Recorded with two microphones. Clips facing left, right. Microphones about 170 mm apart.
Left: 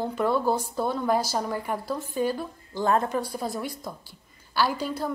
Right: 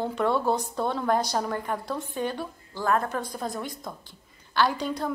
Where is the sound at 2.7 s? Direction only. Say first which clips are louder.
Left 2 dB; 25° left (ahead or behind).